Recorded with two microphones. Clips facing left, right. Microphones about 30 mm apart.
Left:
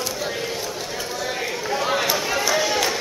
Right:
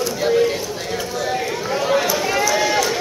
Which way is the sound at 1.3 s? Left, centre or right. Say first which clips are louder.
Right 3 dB; centre.